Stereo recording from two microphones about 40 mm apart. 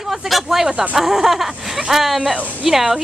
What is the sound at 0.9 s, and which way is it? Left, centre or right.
A woman's voice, centre.